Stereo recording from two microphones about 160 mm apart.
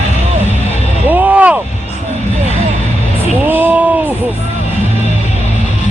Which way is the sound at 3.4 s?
10° right (ahead or behind).